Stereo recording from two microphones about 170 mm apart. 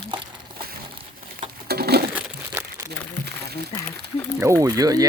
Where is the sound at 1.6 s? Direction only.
70° right (ahead or behind).